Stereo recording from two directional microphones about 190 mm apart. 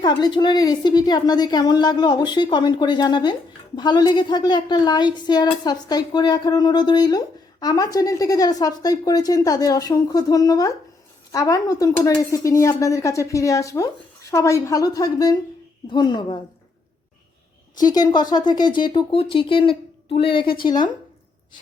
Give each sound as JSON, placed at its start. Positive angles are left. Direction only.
{"t": 0.0, "sound": "a woman's voice", "side_deg": 20}
{"t": 17.7, "sound": "a woman's voice", "side_deg": 20}